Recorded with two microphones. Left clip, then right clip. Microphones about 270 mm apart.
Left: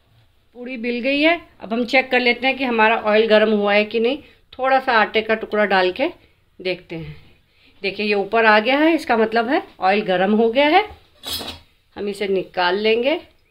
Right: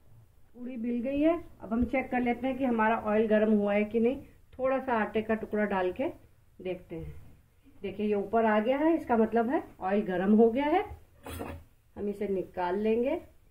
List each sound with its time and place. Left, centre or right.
0.7 s a woman's voice: left
11.9 s a woman's voice: left